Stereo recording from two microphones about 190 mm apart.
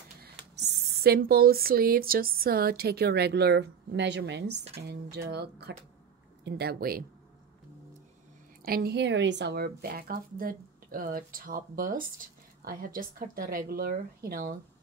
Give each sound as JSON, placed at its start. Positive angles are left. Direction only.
{"t": 0.2, "sound": "speech", "side_deg": -55}
{"t": 8.6, "sound": "speech", "side_deg": -55}